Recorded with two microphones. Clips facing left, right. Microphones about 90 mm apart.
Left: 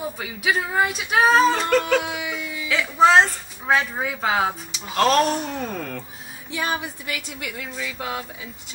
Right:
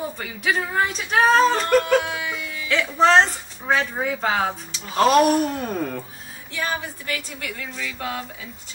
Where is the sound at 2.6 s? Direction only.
5° left (ahead or behind).